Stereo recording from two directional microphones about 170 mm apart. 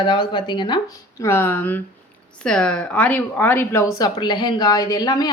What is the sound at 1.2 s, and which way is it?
Speech, 15° left (ahead or behind).